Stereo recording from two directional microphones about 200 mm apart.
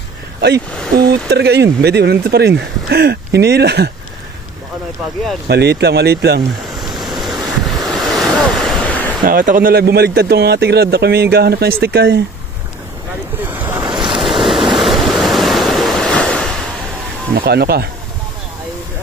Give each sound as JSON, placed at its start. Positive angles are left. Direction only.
{"t": 1.3, "sound": "speech", "side_deg": -55}
{"t": 5.5, "sound": "speech", "side_deg": -55}
{"t": 6.7, "sound": "waves", "side_deg": 0}
{"t": 9.2, "sound": "speech", "side_deg": -45}
{"t": 13.4, "sound": "waves", "side_deg": -10}
{"t": 13.8, "sound": "waves", "side_deg": -25}
{"t": 14.1, "sound": "waves", "side_deg": 0}
{"t": 17.4, "sound": "speech", "side_deg": -50}